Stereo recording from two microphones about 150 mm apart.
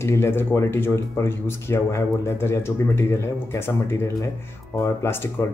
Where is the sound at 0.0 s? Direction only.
15° left (ahead or behind).